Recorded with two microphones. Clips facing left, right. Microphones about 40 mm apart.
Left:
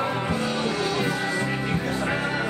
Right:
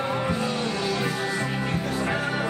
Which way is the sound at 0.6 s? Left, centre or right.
Left.